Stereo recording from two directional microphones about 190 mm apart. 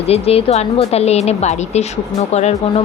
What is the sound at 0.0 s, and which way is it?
A woman's voice, 30° left (ahead or behind).